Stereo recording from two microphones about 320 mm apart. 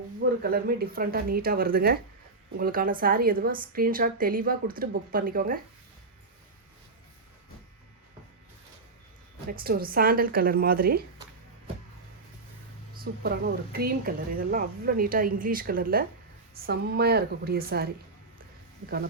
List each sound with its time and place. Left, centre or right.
0.4 s speech: right
9.5 s speech: right
12.9 s speech: right